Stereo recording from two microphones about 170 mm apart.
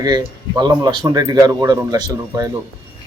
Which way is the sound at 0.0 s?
25° right (ahead or behind).